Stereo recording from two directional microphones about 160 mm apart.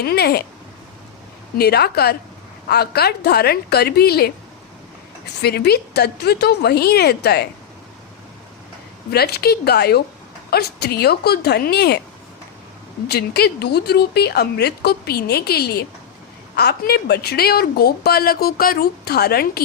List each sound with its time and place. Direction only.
0.0 s a woman's voice: 80° left
1.5 s a woman's voice: 90° left
5.2 s a woman's voice: 90° left
9.0 s a woman's voice: 80° left
13.1 s a woman's voice: 90° left